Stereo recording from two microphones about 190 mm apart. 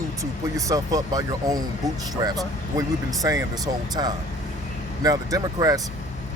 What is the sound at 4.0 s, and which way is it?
Speech, 20° right (ahead or behind).